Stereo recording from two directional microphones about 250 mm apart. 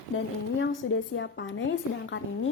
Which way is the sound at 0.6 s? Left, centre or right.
Left.